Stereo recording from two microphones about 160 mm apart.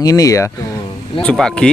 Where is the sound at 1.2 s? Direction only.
5° left (ahead or behind).